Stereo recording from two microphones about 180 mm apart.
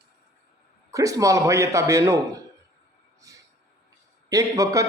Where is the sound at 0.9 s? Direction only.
20° right (ahead or behind).